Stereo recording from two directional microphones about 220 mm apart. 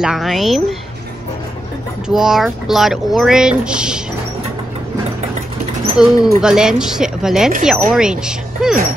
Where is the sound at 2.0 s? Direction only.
Centre (ahead or behind).